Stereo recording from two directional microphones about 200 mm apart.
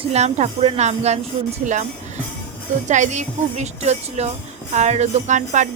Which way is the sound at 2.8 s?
35° right (ahead or behind).